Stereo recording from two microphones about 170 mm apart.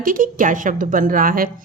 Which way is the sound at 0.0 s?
55° right (ahead or behind).